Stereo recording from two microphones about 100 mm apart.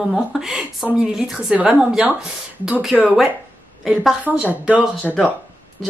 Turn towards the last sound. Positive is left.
turn(degrees=-5)  # may be behind; listen again after turning